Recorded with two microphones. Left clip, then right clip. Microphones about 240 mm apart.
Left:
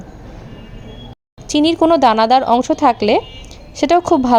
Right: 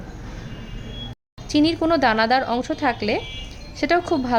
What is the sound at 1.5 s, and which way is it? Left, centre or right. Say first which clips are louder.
A woman's voice: left 6 dB; left.